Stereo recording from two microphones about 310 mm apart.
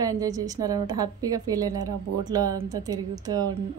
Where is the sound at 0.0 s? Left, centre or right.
Centre.